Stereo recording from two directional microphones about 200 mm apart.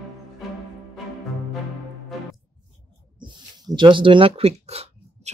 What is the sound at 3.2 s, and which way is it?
Speech, 25° right (ahead or behind).